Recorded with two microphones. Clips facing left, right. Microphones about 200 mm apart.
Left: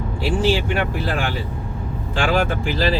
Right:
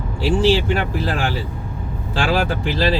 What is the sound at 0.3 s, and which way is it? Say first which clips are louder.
Speech: right 3 dB; 35° right (ahead or behind).